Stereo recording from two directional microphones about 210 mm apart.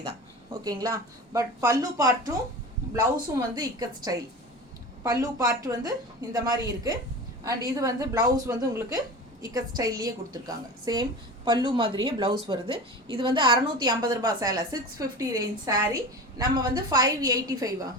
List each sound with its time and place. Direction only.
0.5 s speech: 20° right (ahead or behind)
5.2 s a woman's voice: 15° right (ahead or behind)